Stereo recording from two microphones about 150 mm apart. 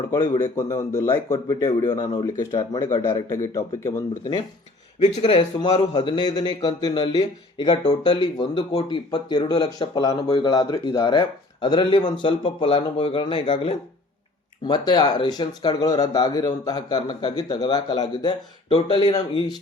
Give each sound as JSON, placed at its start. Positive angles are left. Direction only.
{"t": 0.5, "sound": "speech", "side_deg": 20}
{"t": 5.1, "sound": "a man's voice", "side_deg": 40}